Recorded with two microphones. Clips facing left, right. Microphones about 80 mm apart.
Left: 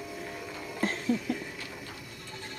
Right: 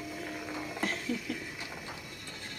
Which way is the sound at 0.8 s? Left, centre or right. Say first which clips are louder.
Left 6 dB; left.